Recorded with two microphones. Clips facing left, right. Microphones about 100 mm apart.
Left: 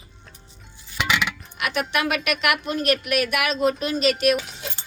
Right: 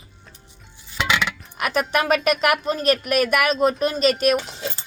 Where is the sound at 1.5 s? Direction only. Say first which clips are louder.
Right 4 dB; 40° right (ahead or behind).